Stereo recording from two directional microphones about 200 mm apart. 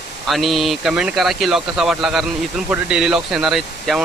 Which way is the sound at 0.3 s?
Centre (ahead or behind).